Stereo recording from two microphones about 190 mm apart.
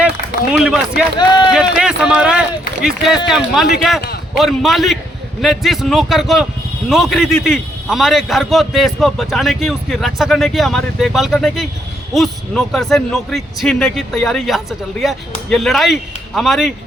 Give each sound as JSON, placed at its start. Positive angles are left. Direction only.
{"t": 0.5, "sound": "a man's voice", "side_deg": 0}
{"t": 1.2, "sound": "speech", "side_deg": 20}
{"t": 1.5, "sound": "a man's voice", "side_deg": -5}